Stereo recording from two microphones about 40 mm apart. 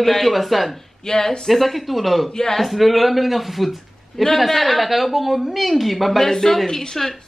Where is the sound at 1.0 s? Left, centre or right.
Centre.